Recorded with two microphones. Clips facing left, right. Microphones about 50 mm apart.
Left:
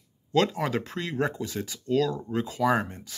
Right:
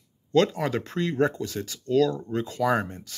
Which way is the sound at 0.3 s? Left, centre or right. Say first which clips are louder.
Right 2 dB; centre.